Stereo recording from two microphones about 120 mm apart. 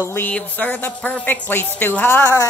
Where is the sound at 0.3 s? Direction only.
10° left (ahead or behind).